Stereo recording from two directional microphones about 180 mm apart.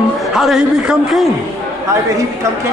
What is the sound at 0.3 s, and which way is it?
A woman's voice, centre (ahead or behind).